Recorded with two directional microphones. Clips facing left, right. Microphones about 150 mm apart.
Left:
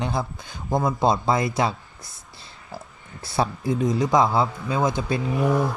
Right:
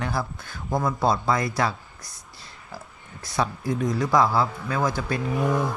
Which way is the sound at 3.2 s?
30° left (ahead or behind).